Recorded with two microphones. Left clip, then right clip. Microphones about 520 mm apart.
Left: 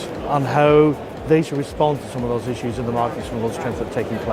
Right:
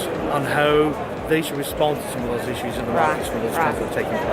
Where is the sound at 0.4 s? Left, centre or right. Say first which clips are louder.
Left 4 dB; left.